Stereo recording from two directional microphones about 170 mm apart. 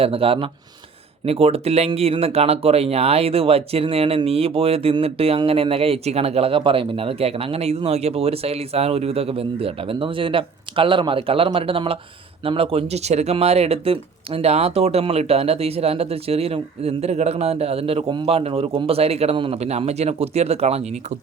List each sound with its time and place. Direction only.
0.0 s speech: 35° right (ahead or behind)